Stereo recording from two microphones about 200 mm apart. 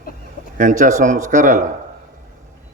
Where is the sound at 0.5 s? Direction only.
40° right (ahead or behind).